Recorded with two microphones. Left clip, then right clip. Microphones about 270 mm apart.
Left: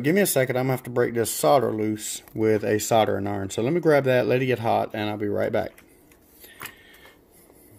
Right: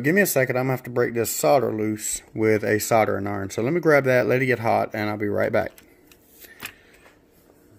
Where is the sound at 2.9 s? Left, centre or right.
Centre.